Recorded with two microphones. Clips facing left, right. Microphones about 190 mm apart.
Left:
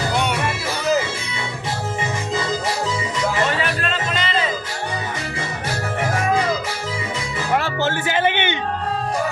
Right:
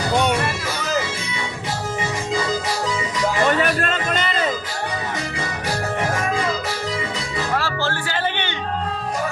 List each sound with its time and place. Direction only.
3.5 s music: 50° right (ahead or behind)
7.5 s music: 20° left (ahead or behind)